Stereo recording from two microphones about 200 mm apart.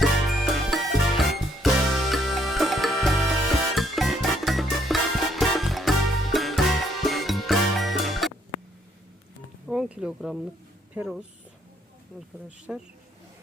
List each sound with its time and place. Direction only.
0.0 s music: centre (ahead or behind)
9.6 s a sound: 5° right (ahead or behind)
12.5 s speech: 5° right (ahead or behind)